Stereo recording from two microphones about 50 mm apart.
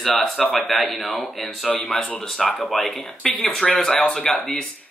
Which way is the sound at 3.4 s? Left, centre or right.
Centre.